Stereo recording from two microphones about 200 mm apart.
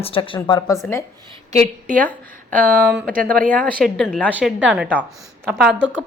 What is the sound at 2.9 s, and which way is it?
Speech, 45° right (ahead or behind).